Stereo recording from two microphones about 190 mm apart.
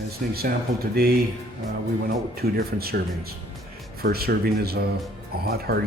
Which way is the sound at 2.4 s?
55° right (ahead or behind).